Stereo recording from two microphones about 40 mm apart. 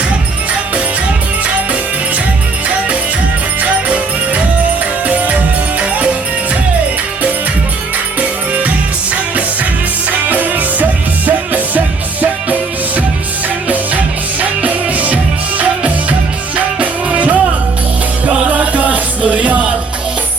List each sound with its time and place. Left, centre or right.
3.6 s music: right
5.0 s music: right
10.1 s music: right
14.6 s music: right
18.4 s music: right